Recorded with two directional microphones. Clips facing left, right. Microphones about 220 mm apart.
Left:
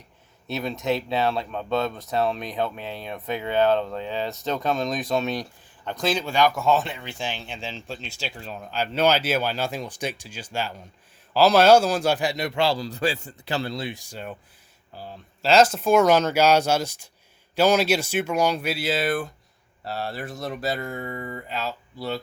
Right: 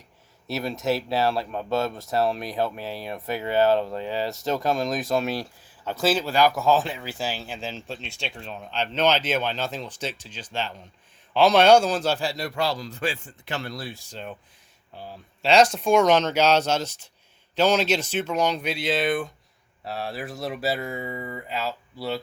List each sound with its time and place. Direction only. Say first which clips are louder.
0.4 s a man's voice: even; centre (ahead or behind)